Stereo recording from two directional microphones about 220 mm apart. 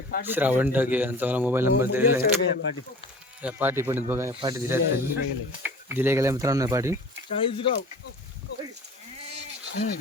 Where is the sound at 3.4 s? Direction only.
5° right (ahead or behind).